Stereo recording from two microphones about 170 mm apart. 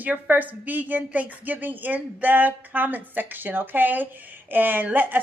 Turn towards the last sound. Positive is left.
turn(degrees=-10)  # may be behind; listen again after turning